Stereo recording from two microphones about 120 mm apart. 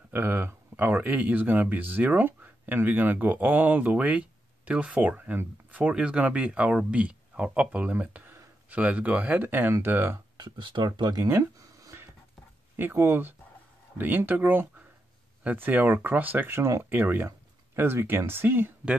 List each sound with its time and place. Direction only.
0.1 s speech: 15° right (ahead or behind)
10.3 s speech: 40° right (ahead or behind)
11.3 s a sound: 25° right (ahead or behind)
12.7 s speech: 20° right (ahead or behind)